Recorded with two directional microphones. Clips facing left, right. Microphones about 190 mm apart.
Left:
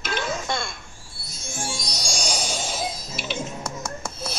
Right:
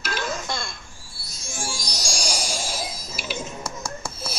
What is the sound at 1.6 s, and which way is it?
Music, centre (ahead or behind).